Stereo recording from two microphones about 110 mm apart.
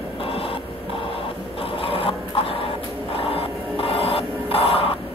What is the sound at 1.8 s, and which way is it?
Printer, 55° left (ahead or behind).